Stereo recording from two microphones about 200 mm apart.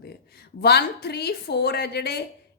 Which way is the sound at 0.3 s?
55° left (ahead or behind).